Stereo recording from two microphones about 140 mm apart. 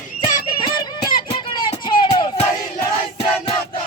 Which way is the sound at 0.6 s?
35° left (ahead or behind).